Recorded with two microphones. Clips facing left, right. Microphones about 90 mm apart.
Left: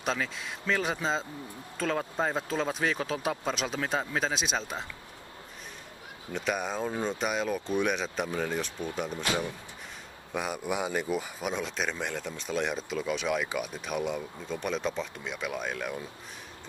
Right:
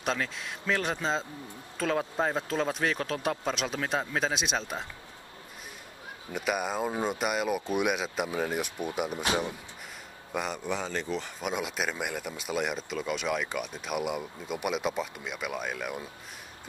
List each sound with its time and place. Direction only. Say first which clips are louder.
0.0 s speech: even; centre (ahead or behind)
6.3 s speech: right 1 dB; 5° right (ahead or behind)
9.2 s speech: right 1 dB; 25° right (ahead or behind)
10.3 s speech: even; 5° left (ahead or behind)
11.5 s speech: right 2 dB; 10° right (ahead or behind)